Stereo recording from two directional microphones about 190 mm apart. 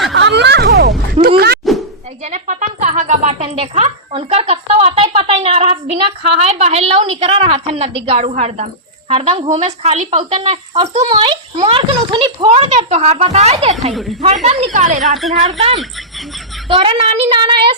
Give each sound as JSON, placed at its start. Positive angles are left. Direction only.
{"t": 0.1, "sound": "a sound", "side_deg": -70}
{"t": 1.2, "sound": "speech", "side_deg": -30}
{"t": 1.6, "sound": "a sound", "side_deg": 0}
{"t": 2.2, "sound": "music", "side_deg": -40}
{"t": 6.4, "sound": "a woman's voice", "side_deg": -35}
{"t": 15.0, "sound": "speech", "side_deg": 0}
{"t": 15.4, "sound": "speech", "side_deg": -30}